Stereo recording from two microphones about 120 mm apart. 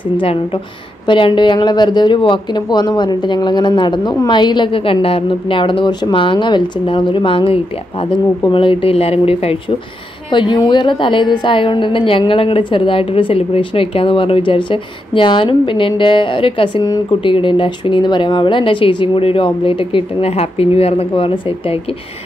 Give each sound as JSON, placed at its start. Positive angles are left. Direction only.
{"t": 1.0, "sound": "speech", "side_deg": 45}
{"t": 10.3, "sound": "a woman's voice", "side_deg": 40}